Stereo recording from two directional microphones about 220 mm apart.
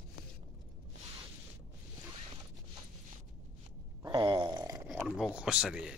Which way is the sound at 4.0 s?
20° right (ahead or behind).